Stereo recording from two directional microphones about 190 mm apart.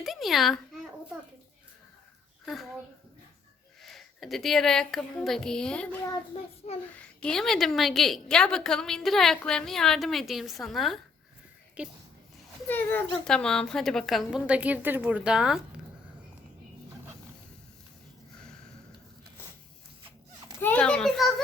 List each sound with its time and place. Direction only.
0.0 s a sound: centre (ahead or behind)
2.4 s a child's voice: centre (ahead or behind)
3.8 s a woman's voice: centre (ahead or behind)
6.9 s a woman's voice: 5° left (ahead or behind)
12.6 s a woman's voice: 10° left (ahead or behind)
20.6 s a woman's voice: 10° left (ahead or behind)